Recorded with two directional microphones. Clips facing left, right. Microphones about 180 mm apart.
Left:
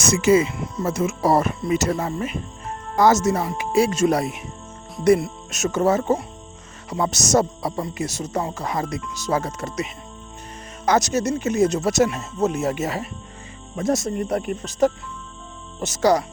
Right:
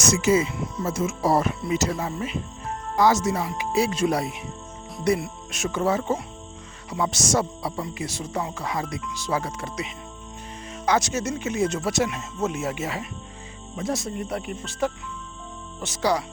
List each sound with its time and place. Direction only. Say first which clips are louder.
0.0 s speech: left 4 dB; 60° left (ahead or behind)